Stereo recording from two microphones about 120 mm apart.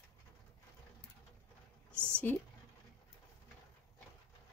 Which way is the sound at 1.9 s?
20° right (ahead or behind).